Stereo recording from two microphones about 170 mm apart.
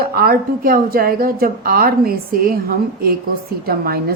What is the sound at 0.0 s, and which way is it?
A woman's voice, 60° right (ahead or behind).